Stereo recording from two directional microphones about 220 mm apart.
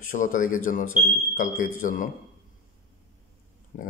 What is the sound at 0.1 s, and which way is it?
Speech, 35° left (ahead or behind).